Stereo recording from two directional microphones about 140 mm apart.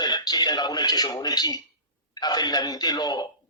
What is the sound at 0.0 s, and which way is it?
A man's voice, 30° left (ahead or behind).